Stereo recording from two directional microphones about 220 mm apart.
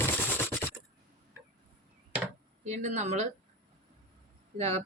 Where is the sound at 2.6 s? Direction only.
30° right (ahead or behind).